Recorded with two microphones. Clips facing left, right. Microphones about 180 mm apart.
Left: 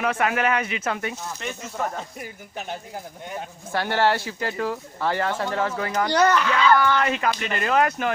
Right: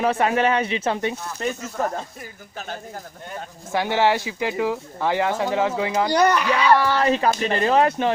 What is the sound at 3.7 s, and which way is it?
Speech, 15° right (ahead or behind).